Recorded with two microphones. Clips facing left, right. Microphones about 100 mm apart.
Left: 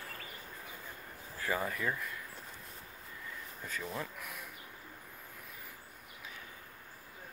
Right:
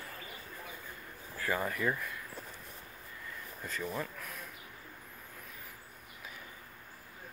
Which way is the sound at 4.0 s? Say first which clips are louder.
Right 2 dB; 15° left (ahead or behind).